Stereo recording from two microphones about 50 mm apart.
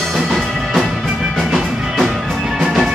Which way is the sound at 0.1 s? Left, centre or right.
Centre.